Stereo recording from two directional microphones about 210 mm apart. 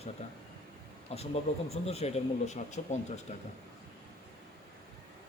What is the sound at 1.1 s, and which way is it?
Speech, 30° left (ahead or behind).